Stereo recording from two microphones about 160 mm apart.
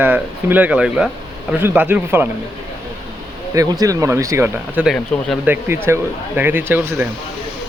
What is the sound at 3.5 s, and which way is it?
Speech, 20° right (ahead or behind).